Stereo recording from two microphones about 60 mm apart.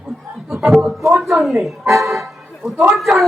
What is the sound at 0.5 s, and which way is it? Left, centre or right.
A woman's voice, centre.